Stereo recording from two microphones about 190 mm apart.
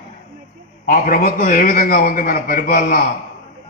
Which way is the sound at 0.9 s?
45° left (ahead or behind).